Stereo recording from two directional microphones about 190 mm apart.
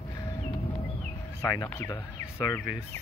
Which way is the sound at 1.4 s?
15° left (ahead or behind).